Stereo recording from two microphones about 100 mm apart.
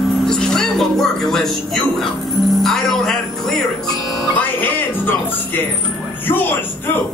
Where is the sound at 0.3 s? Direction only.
5° left (ahead or behind).